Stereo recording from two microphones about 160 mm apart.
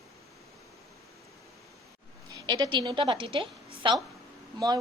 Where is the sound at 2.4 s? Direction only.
30° right (ahead or behind).